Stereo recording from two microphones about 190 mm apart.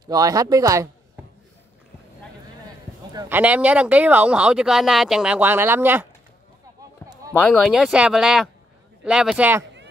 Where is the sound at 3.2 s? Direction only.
10° right (ahead or behind).